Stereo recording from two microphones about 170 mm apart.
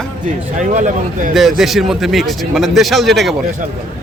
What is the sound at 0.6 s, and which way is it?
Speech, 45° right (ahead or behind).